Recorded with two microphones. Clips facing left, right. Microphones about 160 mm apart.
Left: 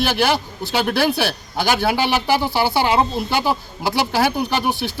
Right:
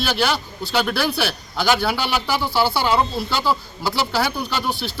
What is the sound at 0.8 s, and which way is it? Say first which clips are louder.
Speech: left 4 dB; 45° left (ahead or behind).